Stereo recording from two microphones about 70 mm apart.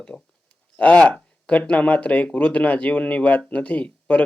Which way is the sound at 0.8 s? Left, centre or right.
Centre.